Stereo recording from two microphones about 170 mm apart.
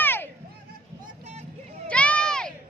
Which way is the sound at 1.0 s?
40° right (ahead or behind).